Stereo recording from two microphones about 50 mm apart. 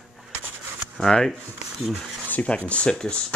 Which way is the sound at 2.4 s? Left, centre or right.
Left.